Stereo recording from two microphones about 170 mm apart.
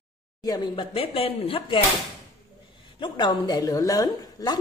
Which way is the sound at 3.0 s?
25° left (ahead or behind).